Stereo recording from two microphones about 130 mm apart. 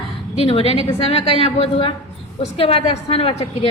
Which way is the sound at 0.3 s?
50° left (ahead or behind).